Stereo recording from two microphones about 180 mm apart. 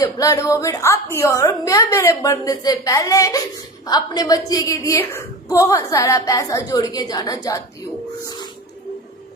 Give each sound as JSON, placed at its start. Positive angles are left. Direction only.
{"t": 0.0, "sound": "a woman's voice", "side_deg": 20}